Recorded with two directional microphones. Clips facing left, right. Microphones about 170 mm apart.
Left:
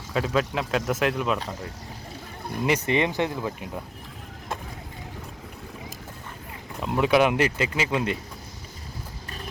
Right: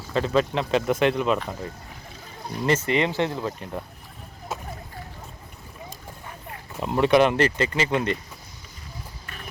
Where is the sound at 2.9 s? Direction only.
20° left (ahead or behind).